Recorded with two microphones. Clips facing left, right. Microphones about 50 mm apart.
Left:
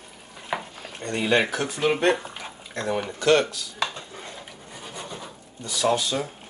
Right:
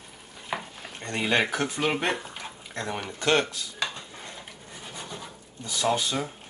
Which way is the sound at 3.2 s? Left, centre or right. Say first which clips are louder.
Left 4 dB; right.